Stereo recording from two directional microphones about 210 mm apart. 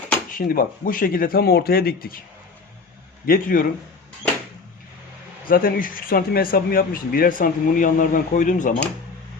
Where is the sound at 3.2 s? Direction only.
40° left (ahead or behind).